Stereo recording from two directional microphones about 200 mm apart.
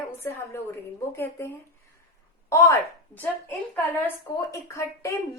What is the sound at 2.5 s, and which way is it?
A woman's voice, 15° left (ahead or behind).